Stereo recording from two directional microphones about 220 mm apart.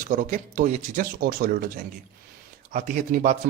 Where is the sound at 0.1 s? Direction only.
35° right (ahead or behind).